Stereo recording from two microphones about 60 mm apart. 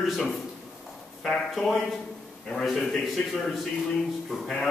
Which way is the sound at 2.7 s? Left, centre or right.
Centre.